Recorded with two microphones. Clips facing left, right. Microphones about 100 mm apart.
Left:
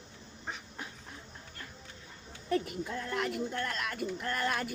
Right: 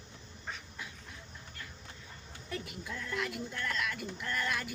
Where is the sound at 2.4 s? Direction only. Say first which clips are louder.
Left 9 dB; 45° left (ahead or behind).